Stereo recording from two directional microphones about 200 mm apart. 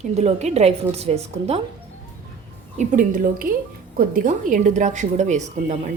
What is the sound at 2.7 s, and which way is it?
A woman's voice, 40° right (ahead or behind).